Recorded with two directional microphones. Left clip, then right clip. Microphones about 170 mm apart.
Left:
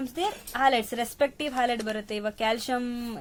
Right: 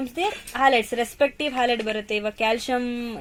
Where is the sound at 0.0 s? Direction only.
30° right (ahead or behind).